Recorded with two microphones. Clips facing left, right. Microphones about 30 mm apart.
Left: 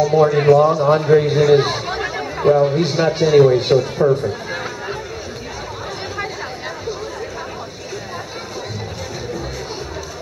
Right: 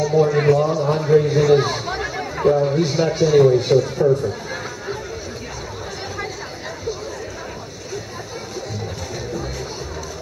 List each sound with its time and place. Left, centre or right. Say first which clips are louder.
0.3 s a man's voice: left 4 dB; centre